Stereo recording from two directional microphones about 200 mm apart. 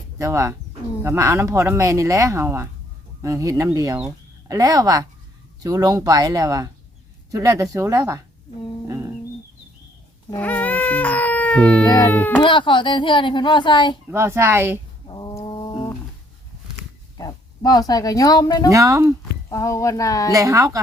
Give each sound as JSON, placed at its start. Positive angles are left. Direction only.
{"t": 0.2, "sound": "speech", "side_deg": -15}
{"t": 8.9, "sound": "a sound", "side_deg": -15}
{"t": 10.2, "sound": "baby cry", "side_deg": 10}
{"t": 11.9, "sound": "speech", "side_deg": 15}
{"t": 12.4, "sound": "speech", "side_deg": 25}
{"t": 14.1, "sound": "speech", "side_deg": -15}
{"t": 15.0, "sound": "roaring cats", "side_deg": 20}
{"t": 17.2, "sound": "speech", "side_deg": 20}
{"t": 18.7, "sound": "speech", "side_deg": -15}
{"t": 19.5, "sound": "speech", "side_deg": 15}
{"t": 20.3, "sound": "speech", "side_deg": -15}